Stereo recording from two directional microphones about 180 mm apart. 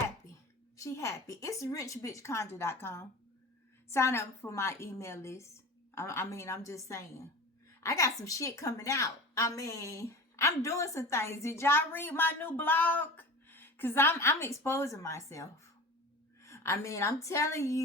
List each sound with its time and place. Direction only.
0.8 s a woman's voice: 15° left (ahead or behind)